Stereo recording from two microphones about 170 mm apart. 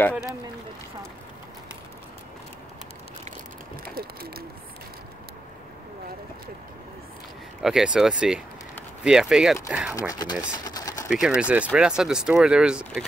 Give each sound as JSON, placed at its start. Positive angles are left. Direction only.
{"t": 3.8, "sound": "speech", "side_deg": -60}
{"t": 7.6, "sound": "speech", "side_deg": -5}
{"t": 9.9, "sound": "speech", "side_deg": 20}
{"t": 10.6, "sound": "a sound", "side_deg": 20}
{"t": 11.1, "sound": "speech", "side_deg": -5}